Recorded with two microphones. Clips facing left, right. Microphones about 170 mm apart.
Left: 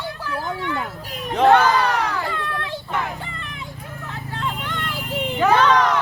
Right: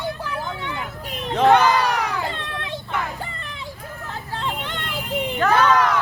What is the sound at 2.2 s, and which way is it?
Children playing, 25° right (ahead or behind).